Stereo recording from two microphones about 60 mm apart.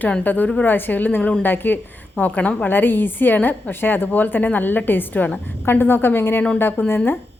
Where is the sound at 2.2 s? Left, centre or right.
Left.